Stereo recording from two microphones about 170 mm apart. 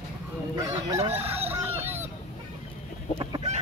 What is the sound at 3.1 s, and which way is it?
Chicken, 35° right (ahead or behind).